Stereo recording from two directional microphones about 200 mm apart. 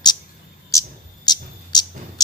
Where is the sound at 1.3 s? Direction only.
20° left (ahead or behind).